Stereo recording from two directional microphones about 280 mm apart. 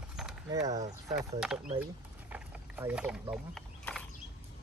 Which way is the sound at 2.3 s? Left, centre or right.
Centre.